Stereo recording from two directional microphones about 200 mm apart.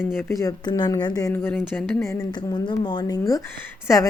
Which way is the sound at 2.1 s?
20° left (ahead or behind).